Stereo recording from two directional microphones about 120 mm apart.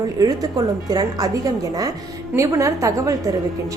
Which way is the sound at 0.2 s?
30° right (ahead or behind).